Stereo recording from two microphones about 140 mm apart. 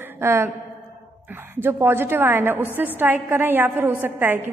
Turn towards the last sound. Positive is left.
turn(degrees=-15)  # may be behind; listen again after turning